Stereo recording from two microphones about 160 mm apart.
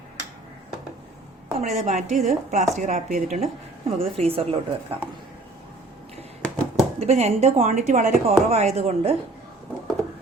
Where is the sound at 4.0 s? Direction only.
35° right (ahead or behind).